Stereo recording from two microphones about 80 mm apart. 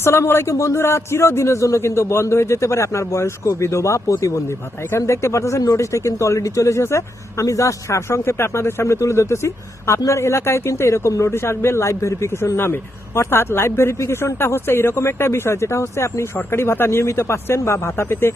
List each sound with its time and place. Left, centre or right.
0.0 s speech: left